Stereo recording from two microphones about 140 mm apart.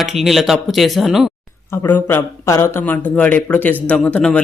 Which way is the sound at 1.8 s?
15° left (ahead or behind).